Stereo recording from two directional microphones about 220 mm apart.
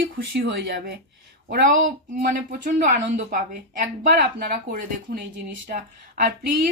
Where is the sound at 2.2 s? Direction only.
35° right (ahead or behind).